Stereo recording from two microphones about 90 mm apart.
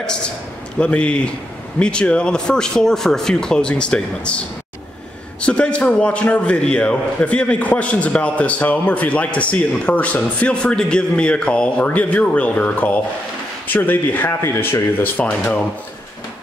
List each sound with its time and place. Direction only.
0.7 s a man's voice: 10° left (ahead or behind)
5.4 s a man's voice: 10° left (ahead or behind)